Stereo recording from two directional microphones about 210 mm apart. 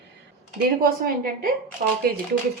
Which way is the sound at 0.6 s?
45° right (ahead or behind).